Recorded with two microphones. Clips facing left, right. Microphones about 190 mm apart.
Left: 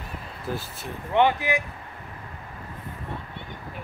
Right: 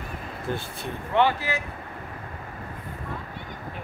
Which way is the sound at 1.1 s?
15° left (ahead or behind).